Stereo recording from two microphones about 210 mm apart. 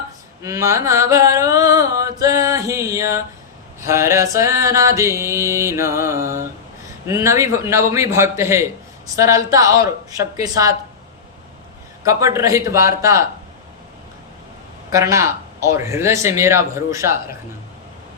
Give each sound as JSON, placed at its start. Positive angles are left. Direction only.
{"t": 0.4, "sound": "mantra", "side_deg": -15}
{"t": 12.0, "sound": "mantra", "side_deg": -15}
{"t": 14.9, "sound": "mantra", "side_deg": -15}